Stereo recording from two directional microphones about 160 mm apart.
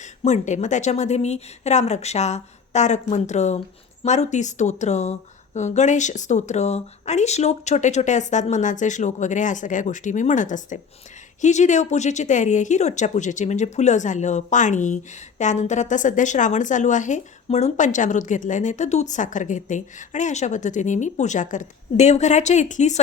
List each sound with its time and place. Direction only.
0.0 s a woman's voice: 50° left (ahead or behind)